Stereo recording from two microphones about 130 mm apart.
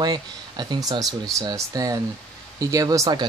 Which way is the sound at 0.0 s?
35° right (ahead or behind).